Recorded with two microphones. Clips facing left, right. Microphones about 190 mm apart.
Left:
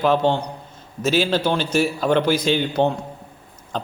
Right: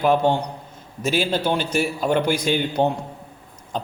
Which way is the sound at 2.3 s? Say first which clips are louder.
Left 2 dB; 55° right (ahead or behind).